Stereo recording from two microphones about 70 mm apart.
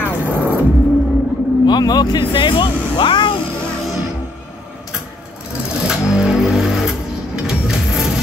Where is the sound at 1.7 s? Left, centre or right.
Left.